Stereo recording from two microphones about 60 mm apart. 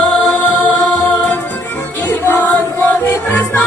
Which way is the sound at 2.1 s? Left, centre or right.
Left.